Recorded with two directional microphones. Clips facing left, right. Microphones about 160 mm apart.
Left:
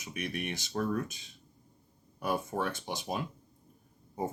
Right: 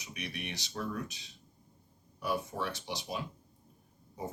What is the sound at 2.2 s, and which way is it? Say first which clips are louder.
Speech: left 3 dB; 50° left (ahead or behind).